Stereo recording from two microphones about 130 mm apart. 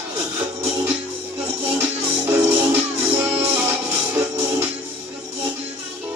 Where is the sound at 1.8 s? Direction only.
15° right (ahead or behind).